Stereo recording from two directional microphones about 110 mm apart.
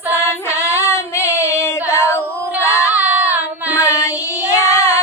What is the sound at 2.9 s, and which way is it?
Child singing, 15° right (ahead or behind).